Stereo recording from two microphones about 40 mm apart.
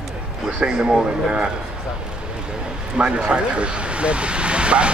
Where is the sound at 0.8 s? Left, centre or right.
Right.